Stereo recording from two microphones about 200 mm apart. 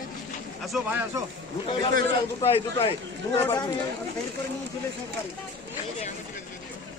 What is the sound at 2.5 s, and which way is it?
Speech, 25° left (ahead or behind).